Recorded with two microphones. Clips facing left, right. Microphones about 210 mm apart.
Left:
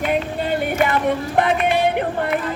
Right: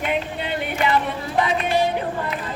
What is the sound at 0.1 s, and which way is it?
Music, 45° left (ahead or behind).